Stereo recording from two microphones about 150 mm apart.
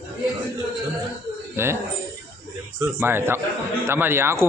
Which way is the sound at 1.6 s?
15° right (ahead or behind).